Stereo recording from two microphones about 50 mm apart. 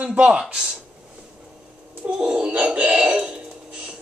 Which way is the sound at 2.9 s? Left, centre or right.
Right.